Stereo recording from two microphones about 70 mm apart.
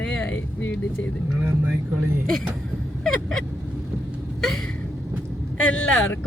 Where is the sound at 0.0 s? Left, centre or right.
Centre.